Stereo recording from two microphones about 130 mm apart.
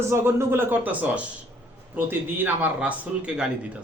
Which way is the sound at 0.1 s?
20° right (ahead or behind).